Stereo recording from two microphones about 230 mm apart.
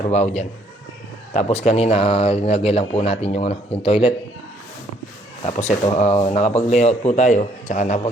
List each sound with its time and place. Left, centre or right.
0.0 s speech: left
5.5 s speech: left